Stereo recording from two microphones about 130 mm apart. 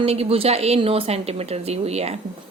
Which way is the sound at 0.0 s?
50° right (ahead or behind).